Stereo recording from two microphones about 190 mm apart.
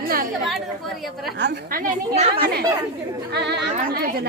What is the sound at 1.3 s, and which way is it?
Speech, 70° right (ahead or behind).